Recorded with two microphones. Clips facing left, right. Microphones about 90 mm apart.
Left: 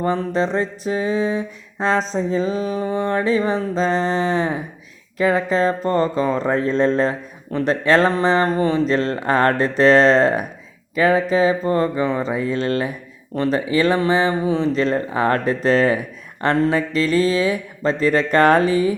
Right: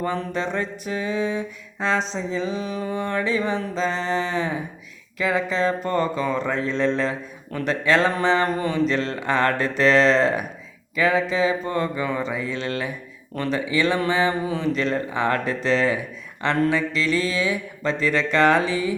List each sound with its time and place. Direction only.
0.0 s mantra: 35° left (ahead or behind)